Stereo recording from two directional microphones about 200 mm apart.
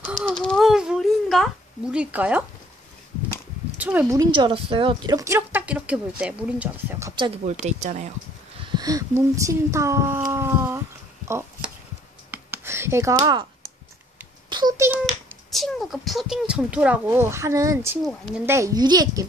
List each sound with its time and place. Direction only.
0.4 s a sound: centre (ahead or behind)
3.7 s speech: 10° right (ahead or behind)
7.6 s speech: 35° right (ahead or behind)
8.5 s speech: 20° right (ahead or behind)
12.3 s a sound: 10° right (ahead or behind)
14.5 s a sound: 20° right (ahead or behind)
15.5 s speech: centre (ahead or behind)
18.0 s speech: centre (ahead or behind)
18.4 s speech: 15° right (ahead or behind)